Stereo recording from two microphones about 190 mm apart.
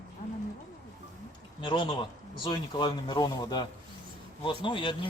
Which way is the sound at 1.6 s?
25° left (ahead or behind).